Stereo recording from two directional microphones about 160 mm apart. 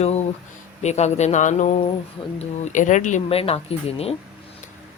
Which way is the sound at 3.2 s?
35° left (ahead or behind).